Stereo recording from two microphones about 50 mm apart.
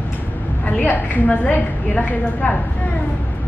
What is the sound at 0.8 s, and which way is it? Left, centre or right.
A woman's voice, left.